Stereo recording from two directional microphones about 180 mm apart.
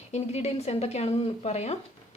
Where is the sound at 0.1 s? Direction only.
35° left (ahead or behind).